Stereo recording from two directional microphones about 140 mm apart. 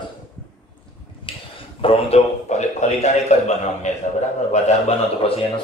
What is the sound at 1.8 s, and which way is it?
A man's voice, 45° left (ahead or behind).